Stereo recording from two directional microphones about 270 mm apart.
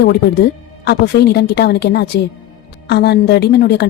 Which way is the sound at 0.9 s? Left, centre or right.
Left.